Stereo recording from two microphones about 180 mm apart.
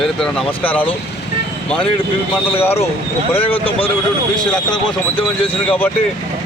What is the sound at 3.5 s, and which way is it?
Speech, 30° left (ahead or behind).